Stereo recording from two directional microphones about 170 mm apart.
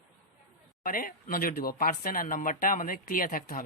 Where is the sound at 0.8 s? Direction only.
55° left (ahead or behind).